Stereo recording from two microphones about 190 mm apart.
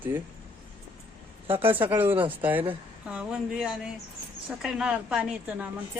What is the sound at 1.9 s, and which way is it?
A woman's voice, 10° right (ahead or behind).